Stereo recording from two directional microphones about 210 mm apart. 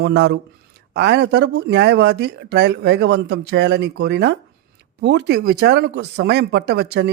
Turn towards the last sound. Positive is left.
turn(degrees=-50)  # may be behind; listen again after turning